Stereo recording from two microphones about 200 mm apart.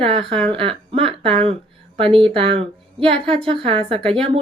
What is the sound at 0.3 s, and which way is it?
Speech, 5° left (ahead or behind).